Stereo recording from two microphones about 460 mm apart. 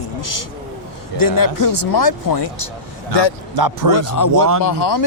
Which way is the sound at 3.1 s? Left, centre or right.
Left.